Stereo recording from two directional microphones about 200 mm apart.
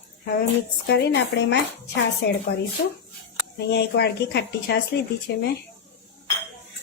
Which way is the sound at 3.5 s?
55° left (ahead or behind).